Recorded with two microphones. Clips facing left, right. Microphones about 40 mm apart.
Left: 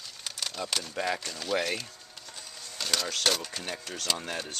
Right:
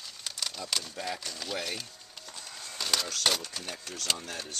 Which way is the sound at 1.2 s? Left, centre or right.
Centre.